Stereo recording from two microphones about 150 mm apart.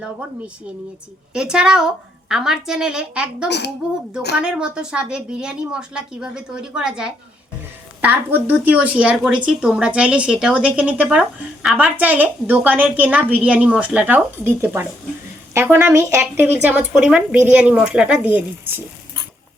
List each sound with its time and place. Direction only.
0.0 s a woman's voice: 5° right (ahead or behind)